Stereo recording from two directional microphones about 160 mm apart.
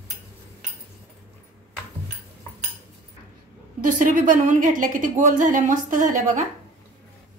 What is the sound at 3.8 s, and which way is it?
A woman's voice, 55° right (ahead or behind).